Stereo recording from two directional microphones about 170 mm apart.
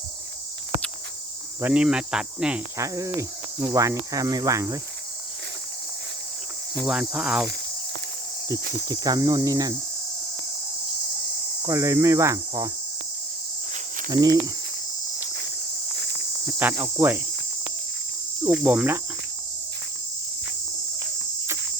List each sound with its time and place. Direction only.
1.6 s cricket: 5° right (ahead or behind)
2.7 s speech: 20° right (ahead or behind)
6.8 s cricket: 5° right (ahead or behind)
8.9 s speech: 25° right (ahead or behind)
11.6 s cricket: 20° right (ahead or behind)
14.1 s speech: 20° right (ahead or behind)
16.5 s cricket: 10° right (ahead or behind)
18.5 s cricket: 5° right (ahead or behind)